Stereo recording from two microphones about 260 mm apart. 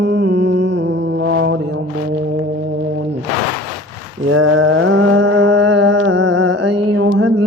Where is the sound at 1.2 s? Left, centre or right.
Right.